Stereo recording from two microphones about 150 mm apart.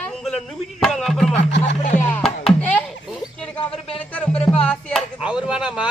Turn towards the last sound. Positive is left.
turn(degrees=-5)  # may be behind; listen again after turning